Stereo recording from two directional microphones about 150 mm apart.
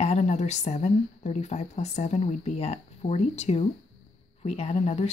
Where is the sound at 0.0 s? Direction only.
50° left (ahead or behind).